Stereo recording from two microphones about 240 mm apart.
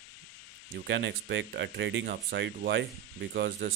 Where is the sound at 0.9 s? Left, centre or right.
Right.